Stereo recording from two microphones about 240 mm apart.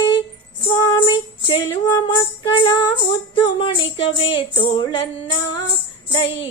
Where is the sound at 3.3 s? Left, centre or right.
Left.